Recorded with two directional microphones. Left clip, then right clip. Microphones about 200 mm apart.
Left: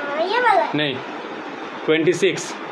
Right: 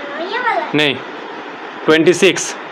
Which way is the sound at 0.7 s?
30° right (ahead or behind).